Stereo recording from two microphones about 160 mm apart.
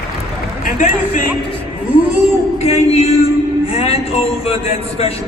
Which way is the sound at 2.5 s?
40° left (ahead or behind).